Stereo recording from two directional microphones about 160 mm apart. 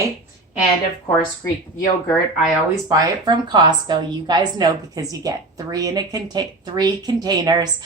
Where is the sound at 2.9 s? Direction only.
25° right (ahead or behind).